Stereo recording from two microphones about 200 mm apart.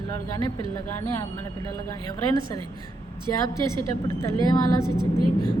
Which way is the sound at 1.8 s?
20° left (ahead or behind).